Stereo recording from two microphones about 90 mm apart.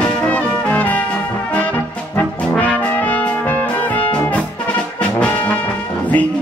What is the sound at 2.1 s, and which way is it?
Brass instrument, 15° left (ahead or behind).